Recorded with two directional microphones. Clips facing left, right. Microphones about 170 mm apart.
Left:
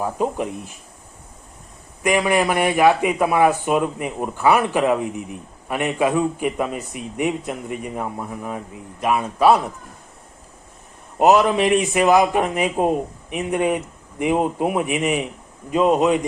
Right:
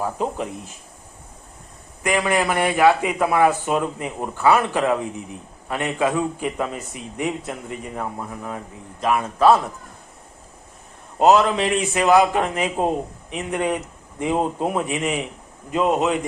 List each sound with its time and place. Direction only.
0.0 s speech: 15° left (ahead or behind)
2.0 s speech: 15° left (ahead or behind)
11.2 s speech: 15° left (ahead or behind)